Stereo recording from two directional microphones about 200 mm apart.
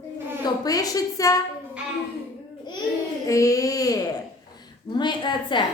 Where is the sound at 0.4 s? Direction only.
20° left (ahead or behind).